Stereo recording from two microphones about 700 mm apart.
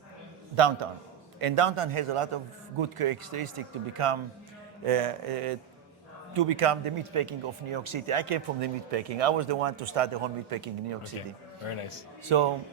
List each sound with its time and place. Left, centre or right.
0.5 s speech: right
11.7 s a man's voice: left
12.3 s speech: right